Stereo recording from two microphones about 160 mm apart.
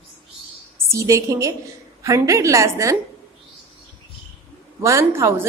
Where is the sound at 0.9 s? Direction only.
20° right (ahead or behind).